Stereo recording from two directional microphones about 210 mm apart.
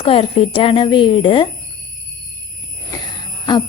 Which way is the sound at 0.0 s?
25° left (ahead or behind).